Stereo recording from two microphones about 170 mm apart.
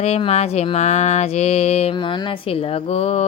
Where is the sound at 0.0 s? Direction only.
40° left (ahead or behind).